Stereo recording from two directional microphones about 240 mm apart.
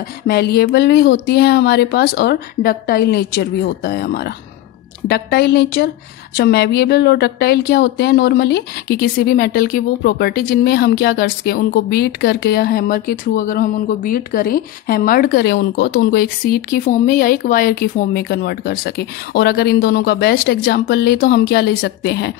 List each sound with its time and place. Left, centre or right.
0.3 s a woman's voice: left